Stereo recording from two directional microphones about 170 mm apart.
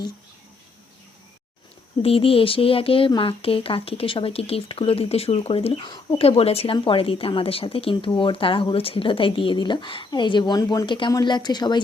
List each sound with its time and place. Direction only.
2.0 s speech: 35° left (ahead or behind)